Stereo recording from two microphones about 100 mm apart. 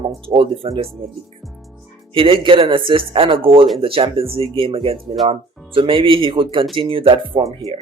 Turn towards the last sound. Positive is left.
turn(degrees=-55)  # may be behind; listen again after turning